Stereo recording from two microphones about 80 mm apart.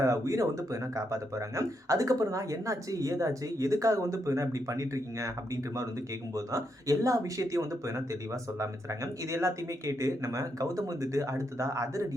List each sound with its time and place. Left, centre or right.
0.0 s speech: right
6.3 s speech: right